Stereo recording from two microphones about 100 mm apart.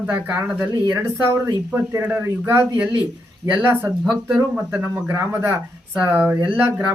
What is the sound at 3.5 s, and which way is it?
Speech, 15° right (ahead or behind).